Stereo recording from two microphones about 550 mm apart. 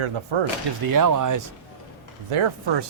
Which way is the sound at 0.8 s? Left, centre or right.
Right.